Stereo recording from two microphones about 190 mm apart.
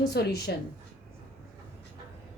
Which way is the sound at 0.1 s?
60° left (ahead or behind).